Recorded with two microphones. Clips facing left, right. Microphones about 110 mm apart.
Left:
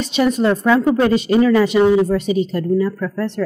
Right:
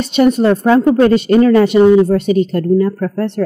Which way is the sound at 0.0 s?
50° right (ahead or behind).